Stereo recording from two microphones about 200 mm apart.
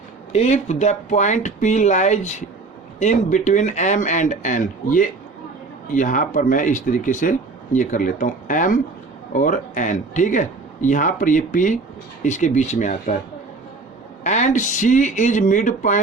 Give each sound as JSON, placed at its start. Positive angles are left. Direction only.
{"t": 0.3, "sound": "speech", "side_deg": 35}
{"t": 14.3, "sound": "speech", "side_deg": 35}